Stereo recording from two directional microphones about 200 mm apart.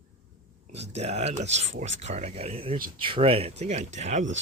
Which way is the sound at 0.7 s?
30° right (ahead or behind).